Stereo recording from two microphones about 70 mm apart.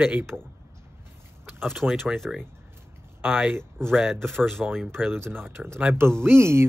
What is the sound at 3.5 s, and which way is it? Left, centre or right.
Speech, right.